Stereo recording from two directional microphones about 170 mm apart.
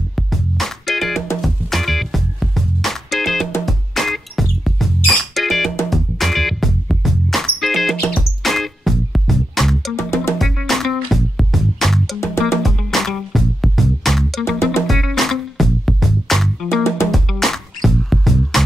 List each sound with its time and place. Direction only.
0.1 s music: centre (ahead or behind)
9.9 s music: 15° left (ahead or behind)
10.4 s music: centre (ahead or behind)